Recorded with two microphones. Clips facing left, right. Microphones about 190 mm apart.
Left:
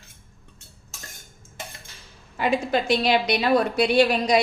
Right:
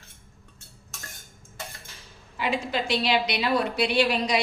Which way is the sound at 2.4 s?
50° left (ahead or behind).